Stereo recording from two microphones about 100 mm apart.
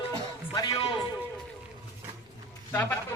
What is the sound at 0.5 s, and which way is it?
Speech, 40° left (ahead or behind).